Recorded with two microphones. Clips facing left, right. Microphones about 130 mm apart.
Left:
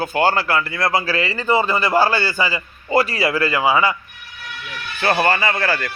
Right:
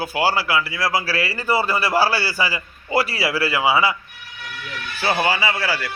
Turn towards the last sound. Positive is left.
turn(degrees=-10)  # may be behind; listen again after turning